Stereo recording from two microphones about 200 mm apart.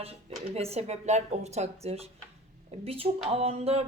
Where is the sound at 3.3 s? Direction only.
30° right (ahead or behind).